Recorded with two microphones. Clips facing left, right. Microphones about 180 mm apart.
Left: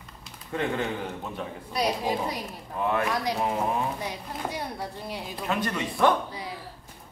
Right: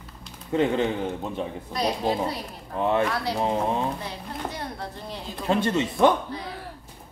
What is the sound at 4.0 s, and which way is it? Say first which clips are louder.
Speech: even; 10° left (ahead or behind).